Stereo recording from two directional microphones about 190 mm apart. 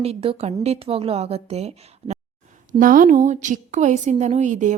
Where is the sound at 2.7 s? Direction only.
45° right (ahead or behind).